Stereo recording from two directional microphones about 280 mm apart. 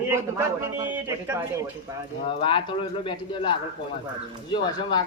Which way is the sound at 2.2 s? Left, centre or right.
Centre.